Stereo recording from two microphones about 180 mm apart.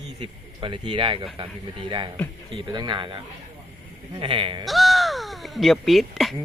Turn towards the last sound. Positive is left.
turn(degrees=0)  # may be behind; listen again after turning